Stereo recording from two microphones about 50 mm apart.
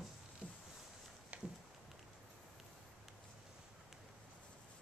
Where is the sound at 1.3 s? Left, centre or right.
Right.